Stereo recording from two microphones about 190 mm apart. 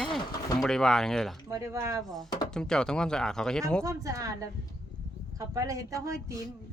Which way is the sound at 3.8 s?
15° right (ahead or behind).